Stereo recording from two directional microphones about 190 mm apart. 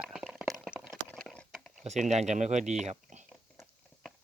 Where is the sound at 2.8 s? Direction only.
35° right (ahead or behind).